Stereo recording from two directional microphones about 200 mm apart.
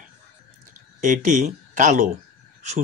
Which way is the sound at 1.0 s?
40° right (ahead or behind).